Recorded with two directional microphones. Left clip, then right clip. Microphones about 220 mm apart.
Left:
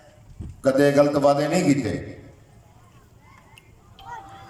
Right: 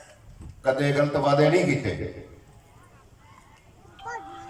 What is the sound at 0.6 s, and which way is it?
A man's voice, 50° left (ahead or behind).